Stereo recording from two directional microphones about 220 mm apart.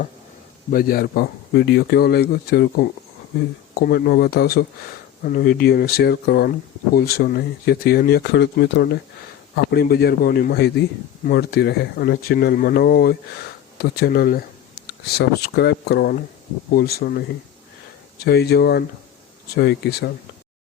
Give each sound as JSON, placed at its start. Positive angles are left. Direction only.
{"t": 0.7, "sound": "speech", "side_deg": 40}